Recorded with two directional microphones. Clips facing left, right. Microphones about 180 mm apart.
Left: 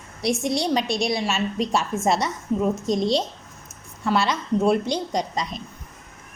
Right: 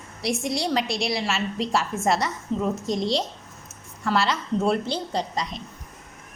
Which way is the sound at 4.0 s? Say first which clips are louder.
Left 1 dB; 20° left (ahead or behind).